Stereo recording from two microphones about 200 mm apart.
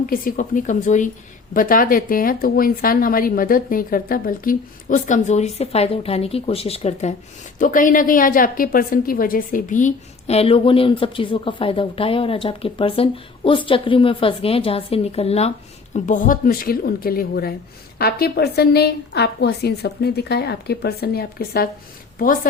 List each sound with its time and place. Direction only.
0.0 s a woman's voice: 45° left (ahead or behind)
7.6 s a woman's voice: 40° left (ahead or behind)